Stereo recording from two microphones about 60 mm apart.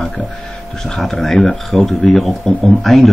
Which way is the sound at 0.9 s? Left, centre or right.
Centre.